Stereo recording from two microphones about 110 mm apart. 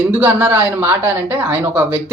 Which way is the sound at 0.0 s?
10° right (ahead or behind).